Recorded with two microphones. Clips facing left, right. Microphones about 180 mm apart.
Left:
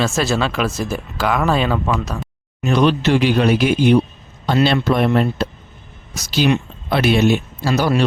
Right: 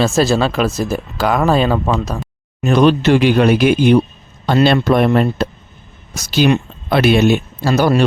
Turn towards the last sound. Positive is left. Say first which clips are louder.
# right 4 dB
turn(degrees=-50)  # may be behind; listen again after turning